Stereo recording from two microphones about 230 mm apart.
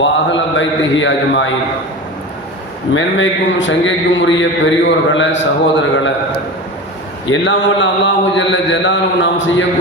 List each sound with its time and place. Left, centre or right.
0.0 s a man's voice: left
2.9 s a man's voice: left
7.3 s a man's voice: left